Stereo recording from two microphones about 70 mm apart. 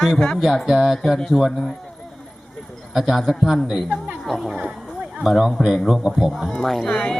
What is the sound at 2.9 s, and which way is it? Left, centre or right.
Speech, centre.